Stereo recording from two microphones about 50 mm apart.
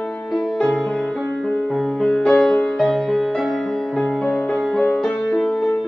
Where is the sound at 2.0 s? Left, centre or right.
Centre.